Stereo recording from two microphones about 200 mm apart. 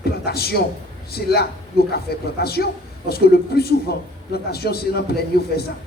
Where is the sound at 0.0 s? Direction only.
50° left (ahead or behind).